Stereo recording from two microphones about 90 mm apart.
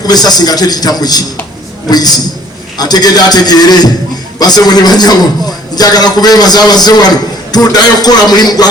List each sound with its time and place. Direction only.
0.1 s a man's voice: 50° left (ahead or behind)